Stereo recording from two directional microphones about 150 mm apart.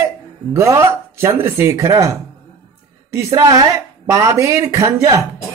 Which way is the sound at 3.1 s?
20° right (ahead or behind).